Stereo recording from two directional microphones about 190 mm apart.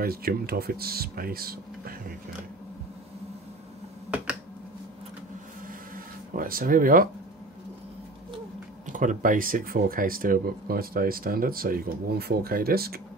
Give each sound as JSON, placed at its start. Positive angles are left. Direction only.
{"t": 0.0, "sound": "speech", "side_deg": -50}
{"t": 6.3, "sound": "speech", "side_deg": -50}
{"t": 8.8, "sound": "speech", "side_deg": -45}